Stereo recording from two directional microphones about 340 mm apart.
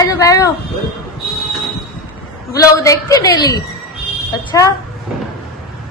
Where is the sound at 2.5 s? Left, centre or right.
Centre.